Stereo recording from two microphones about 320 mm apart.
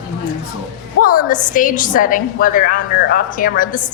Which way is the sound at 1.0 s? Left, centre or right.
Left.